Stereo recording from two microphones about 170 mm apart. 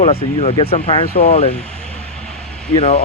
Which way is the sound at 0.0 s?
35° left (ahead or behind).